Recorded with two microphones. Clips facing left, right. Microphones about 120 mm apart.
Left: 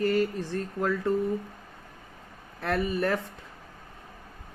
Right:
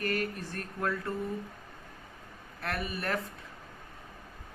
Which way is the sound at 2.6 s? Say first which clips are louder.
Left 8 dB; 25° left (ahead or behind).